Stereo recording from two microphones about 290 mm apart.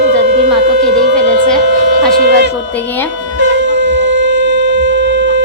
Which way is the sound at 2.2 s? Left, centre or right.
Right.